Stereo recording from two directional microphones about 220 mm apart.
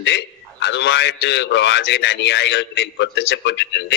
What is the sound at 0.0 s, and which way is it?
A man's voice, 50° left (ahead or behind).